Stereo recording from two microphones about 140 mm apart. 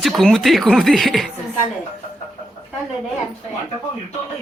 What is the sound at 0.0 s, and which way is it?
Snicker, centre (ahead or behind).